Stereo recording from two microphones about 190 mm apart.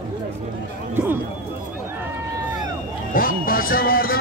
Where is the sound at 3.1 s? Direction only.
50° left (ahead or behind).